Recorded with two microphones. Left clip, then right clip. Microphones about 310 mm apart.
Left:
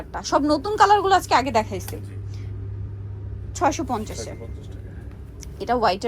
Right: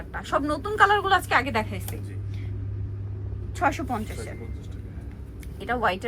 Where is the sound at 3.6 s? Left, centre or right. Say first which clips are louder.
Left 3 dB; centre.